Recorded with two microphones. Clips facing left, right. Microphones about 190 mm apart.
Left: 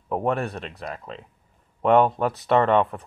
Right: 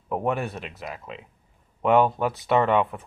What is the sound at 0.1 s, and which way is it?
Speech, centre (ahead or behind).